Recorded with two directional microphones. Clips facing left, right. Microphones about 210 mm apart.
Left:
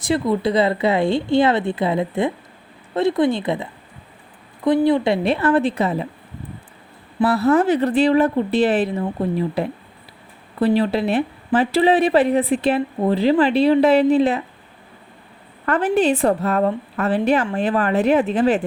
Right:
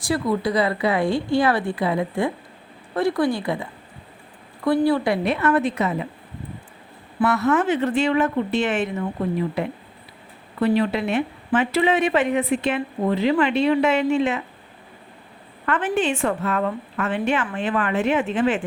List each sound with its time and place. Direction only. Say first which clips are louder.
0.0 s a woman's voice: left 3 dB; 25° left (ahead or behind)
7.2 s a woman's voice: left 4 dB; 35° left (ahead or behind)
15.6 s a woman's voice: left 5 dB; 40° left (ahead or behind)